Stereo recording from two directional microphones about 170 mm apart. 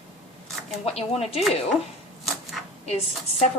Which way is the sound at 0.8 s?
35° left (ahead or behind).